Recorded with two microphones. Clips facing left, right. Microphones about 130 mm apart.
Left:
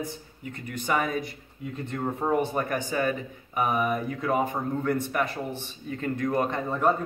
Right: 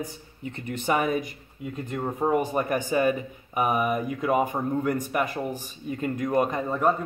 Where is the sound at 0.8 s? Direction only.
20° right (ahead or behind).